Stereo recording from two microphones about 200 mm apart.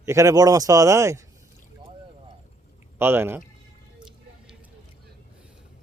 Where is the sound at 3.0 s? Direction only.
10° right (ahead or behind).